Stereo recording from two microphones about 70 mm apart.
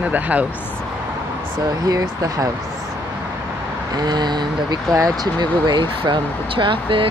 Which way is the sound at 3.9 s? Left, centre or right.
Right.